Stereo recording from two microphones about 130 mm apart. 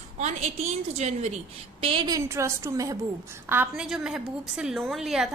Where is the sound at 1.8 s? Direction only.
45° right (ahead or behind).